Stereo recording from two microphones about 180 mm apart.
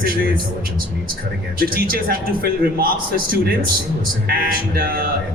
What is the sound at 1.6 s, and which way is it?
A man's voice, 55° right (ahead or behind).